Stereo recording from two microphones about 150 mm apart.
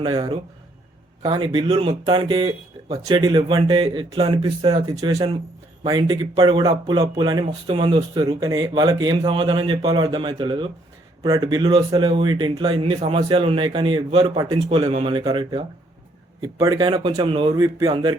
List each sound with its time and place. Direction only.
0.0 s speech: 30° right (ahead or behind)
17.5 s speech: 25° right (ahead or behind)